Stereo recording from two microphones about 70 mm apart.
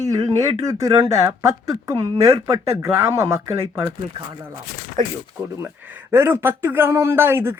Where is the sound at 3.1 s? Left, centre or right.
Right.